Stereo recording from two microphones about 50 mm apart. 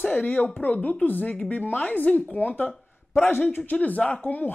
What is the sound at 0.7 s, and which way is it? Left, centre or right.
Speech, left.